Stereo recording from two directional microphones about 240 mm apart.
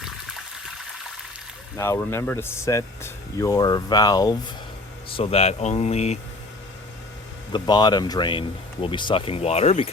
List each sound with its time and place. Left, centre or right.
1.7 s speech: centre; by 6.1 s left
7.5 s speech: centre